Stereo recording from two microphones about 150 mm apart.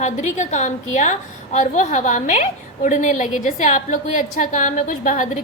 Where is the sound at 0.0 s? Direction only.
50° left (ahead or behind).